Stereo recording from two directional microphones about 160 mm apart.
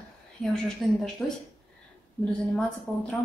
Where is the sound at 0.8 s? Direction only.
Centre (ahead or behind).